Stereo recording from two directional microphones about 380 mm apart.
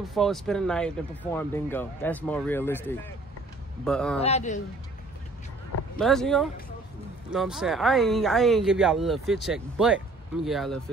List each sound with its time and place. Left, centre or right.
0.1 s speech: centre
4.2 s speech: centre
5.9 s speech: centre